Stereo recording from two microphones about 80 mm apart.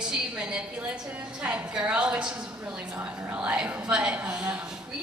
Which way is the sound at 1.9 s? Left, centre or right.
Centre.